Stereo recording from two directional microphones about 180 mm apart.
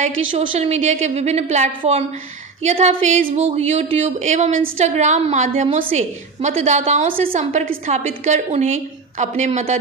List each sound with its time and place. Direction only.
0.4 s speech: 35° right (ahead or behind)
7.1 s a woman's voice: 50° right (ahead or behind)